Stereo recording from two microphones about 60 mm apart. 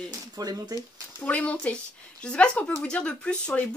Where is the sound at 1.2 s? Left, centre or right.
Left.